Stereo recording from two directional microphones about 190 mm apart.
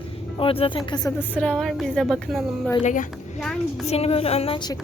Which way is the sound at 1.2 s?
10° left (ahead or behind).